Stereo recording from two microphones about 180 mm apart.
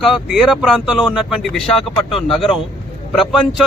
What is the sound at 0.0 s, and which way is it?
Speech, centre (ahead or behind).